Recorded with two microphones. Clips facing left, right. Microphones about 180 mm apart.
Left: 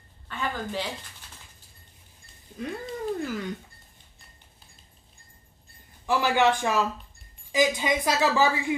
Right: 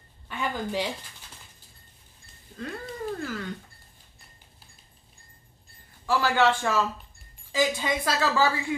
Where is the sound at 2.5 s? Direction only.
15° left (ahead or behind).